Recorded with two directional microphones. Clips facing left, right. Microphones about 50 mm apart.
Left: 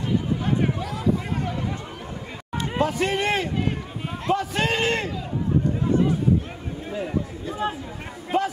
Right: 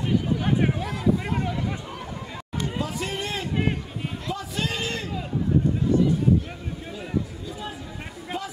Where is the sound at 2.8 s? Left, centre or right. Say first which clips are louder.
Left 10 dB; left.